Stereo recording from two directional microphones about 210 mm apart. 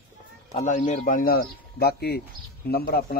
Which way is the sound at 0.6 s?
35° left (ahead or behind).